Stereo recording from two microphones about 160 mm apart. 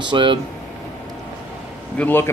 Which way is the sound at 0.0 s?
30° right (ahead or behind).